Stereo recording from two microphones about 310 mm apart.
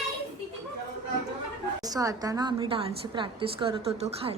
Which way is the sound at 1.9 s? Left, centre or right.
Centre.